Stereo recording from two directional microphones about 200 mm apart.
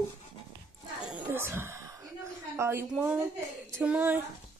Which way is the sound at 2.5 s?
15° right (ahead or behind).